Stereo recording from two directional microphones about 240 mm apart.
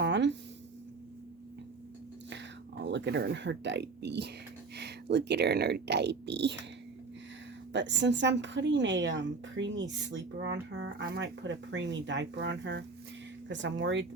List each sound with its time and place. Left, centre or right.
0.0 s a sound: right
2.8 s speech: right
7.7 s speech: right